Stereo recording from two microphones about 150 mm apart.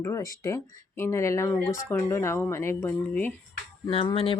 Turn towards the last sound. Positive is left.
turn(degrees=35)  # may be behind; listen again after turning